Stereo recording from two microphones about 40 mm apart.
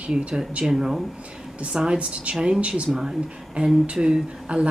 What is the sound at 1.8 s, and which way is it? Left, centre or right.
Speech, right.